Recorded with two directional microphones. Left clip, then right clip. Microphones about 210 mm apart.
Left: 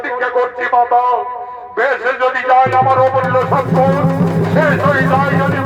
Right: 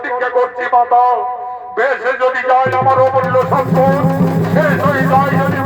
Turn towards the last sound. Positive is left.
turn(degrees=-30)  # may be behind; listen again after turning